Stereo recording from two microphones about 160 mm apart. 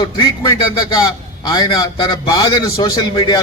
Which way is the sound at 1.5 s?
25° left (ahead or behind).